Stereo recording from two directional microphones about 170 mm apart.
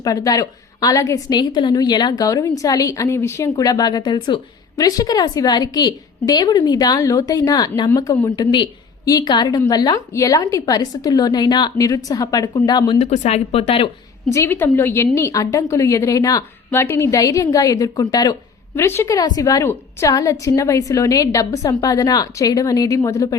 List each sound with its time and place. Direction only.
0.0 s a woman's voice: 20° left (ahead or behind)
13.0 s speech: 40° left (ahead or behind)
14.3 s a woman's voice: 15° left (ahead or behind)